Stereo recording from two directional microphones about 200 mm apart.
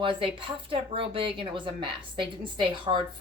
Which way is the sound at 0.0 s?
25° right (ahead or behind).